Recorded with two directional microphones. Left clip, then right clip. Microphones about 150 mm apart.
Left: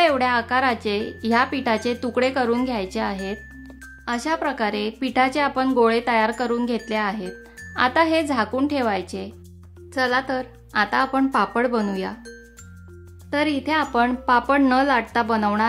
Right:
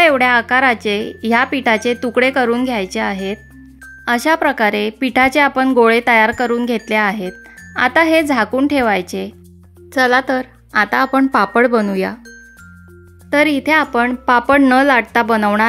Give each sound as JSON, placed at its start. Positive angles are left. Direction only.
{"t": 0.0, "sound": "speech", "side_deg": -35}
{"t": 4.0, "sound": "speech", "side_deg": -45}
{"t": 13.3, "sound": "speech", "side_deg": -45}